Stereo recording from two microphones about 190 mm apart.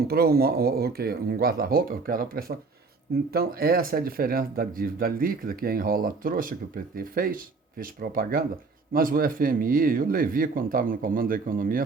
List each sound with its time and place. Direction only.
0.1 s speech: 55° right (ahead or behind)